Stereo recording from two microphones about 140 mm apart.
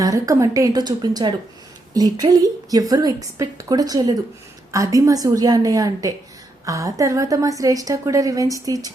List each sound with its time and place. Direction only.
0.0 s a woman's voice: 25° right (ahead or behind)